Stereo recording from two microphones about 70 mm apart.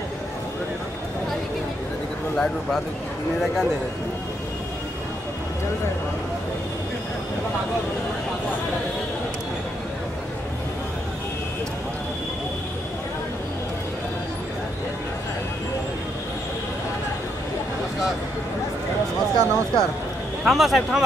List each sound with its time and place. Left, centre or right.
2.3 s speech: centre
19.3 s speech: right
20.4 s speech: centre